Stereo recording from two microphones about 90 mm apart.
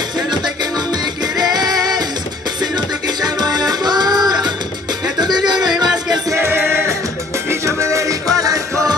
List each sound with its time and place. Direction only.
0.3 s music: 50° right (ahead or behind)
6.4 s music: 25° right (ahead or behind)